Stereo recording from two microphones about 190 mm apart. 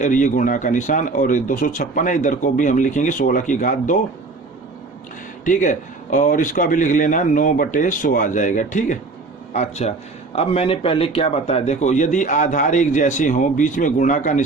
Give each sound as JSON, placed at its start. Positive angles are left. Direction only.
{"t": 0.0, "sound": "speech", "side_deg": 40}
{"t": 5.5, "sound": "a man's voice", "side_deg": 40}